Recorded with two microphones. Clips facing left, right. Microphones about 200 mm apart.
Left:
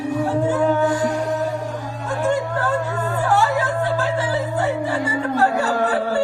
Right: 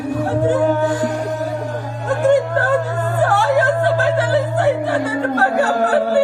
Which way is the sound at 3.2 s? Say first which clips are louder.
Right 5 dB; 60° right (ahead or behind).